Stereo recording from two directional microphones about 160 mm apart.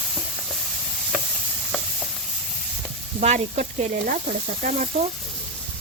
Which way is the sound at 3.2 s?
45° right (ahead or behind).